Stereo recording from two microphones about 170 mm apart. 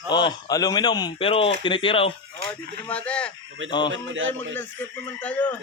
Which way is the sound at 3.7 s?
25° left (ahead or behind).